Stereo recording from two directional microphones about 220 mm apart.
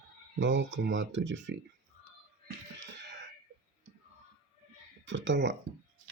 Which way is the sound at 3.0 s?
55° right (ahead or behind).